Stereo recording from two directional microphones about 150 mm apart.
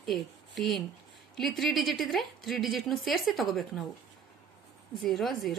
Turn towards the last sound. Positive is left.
turn(degrees=0)  # may be behind; listen again after turning